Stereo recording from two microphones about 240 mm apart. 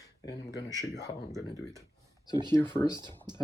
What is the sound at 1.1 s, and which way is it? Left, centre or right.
Speech, centre.